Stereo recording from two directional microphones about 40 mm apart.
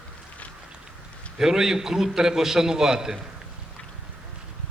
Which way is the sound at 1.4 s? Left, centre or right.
Centre.